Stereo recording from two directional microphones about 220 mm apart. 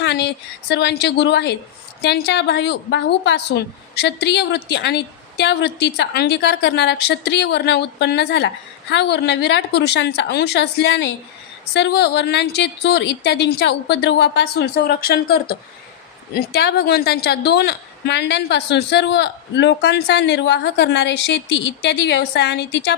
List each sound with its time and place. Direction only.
0.0 s a woman's voice: 50° left (ahead or behind)